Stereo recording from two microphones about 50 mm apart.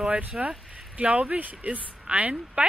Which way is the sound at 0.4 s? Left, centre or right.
Right.